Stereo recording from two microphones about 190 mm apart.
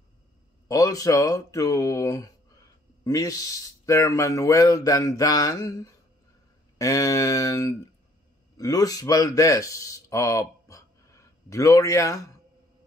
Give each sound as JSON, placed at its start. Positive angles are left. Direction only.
{"t": 0.7, "sound": "speech", "side_deg": 20}